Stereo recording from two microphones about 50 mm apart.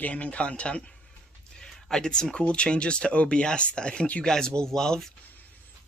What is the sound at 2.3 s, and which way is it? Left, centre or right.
Speech, left.